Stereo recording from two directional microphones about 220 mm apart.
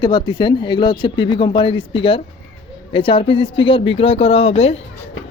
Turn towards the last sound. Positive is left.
turn(degrees=25)  # may be behind; listen again after turning